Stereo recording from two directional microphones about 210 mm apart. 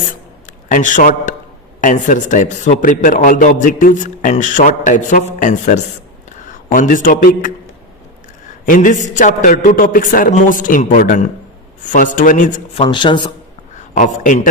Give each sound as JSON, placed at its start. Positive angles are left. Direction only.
{"t": 0.7, "sound": "a man's voice", "side_deg": 40}
{"t": 8.6, "sound": "a man's voice", "side_deg": 40}
{"t": 12.7, "sound": "speech", "side_deg": 25}
{"t": 13.9, "sound": "a man's voice", "side_deg": 40}